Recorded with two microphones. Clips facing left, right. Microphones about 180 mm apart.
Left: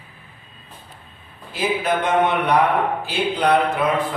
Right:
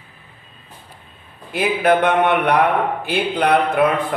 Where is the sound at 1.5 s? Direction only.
60° right (ahead or behind).